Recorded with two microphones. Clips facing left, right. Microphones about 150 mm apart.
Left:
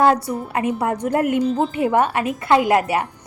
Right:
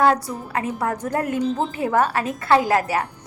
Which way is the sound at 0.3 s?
25° left (ahead or behind).